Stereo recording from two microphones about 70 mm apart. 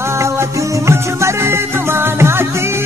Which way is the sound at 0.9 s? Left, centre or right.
Right.